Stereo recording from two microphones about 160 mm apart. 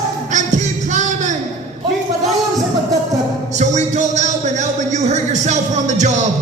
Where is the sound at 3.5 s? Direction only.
50° right (ahead or behind).